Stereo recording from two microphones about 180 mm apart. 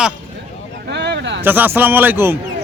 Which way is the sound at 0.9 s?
70° right (ahead or behind).